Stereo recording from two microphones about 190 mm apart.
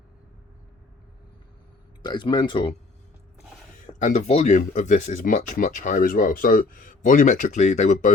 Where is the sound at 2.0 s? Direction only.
25° left (ahead or behind).